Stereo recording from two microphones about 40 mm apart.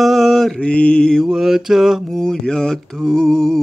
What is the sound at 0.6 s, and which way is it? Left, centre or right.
Mantra, left.